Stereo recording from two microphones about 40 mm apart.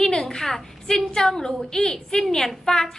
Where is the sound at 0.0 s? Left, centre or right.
Centre.